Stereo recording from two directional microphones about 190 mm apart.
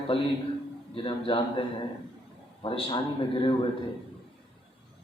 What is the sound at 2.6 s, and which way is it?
Speech, 25° left (ahead or behind).